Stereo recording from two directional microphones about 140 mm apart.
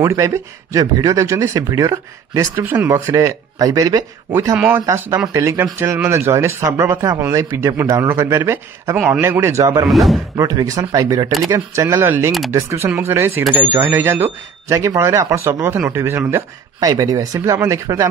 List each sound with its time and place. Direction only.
0.0 s speech: 20° right (ahead or behind)
3.1 s speech: 25° right (ahead or behind)
8.9 s speech: 5° right (ahead or behind)
9.2 s speech: 20° right (ahead or behind)
9.8 s speech: centre (ahead or behind)
10.3 s speech: 25° right (ahead or behind)